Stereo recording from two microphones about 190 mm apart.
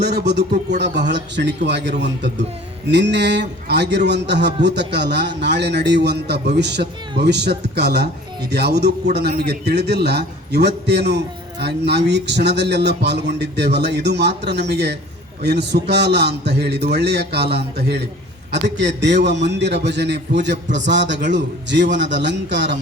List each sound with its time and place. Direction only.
0.0 s a man's voice: 60° right (ahead or behind)